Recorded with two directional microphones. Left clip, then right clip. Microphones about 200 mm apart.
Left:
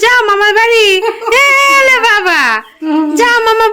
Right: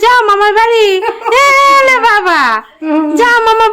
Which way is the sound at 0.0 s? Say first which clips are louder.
Right 1 dB; 5° right (ahead or behind).